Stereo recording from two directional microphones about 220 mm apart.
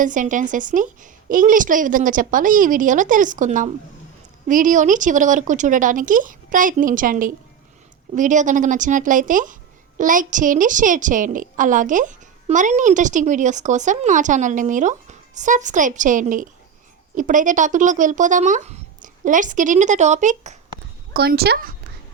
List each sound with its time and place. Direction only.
0.0 s a woman's voice: 35° right (ahead or behind)
21.1 s a woman's voice: 45° right (ahead or behind)